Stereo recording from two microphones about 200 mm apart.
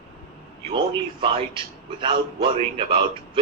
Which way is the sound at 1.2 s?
25° right (ahead or behind).